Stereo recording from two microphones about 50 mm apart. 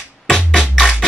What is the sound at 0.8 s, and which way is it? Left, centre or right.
Music, centre.